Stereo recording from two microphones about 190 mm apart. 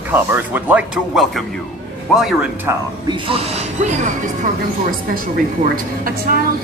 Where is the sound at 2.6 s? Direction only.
25° right (ahead or behind).